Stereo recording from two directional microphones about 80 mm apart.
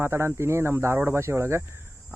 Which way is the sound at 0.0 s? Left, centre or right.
Right.